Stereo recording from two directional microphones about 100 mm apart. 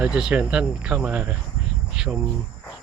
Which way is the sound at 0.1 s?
10° right (ahead or behind).